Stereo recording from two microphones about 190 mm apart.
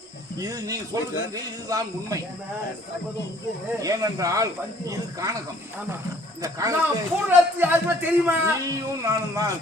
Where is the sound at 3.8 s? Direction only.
20° right (ahead or behind).